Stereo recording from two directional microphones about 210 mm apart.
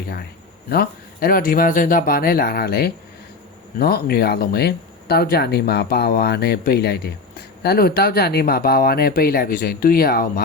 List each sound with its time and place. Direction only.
0.7 s speech: 45° left (ahead or behind)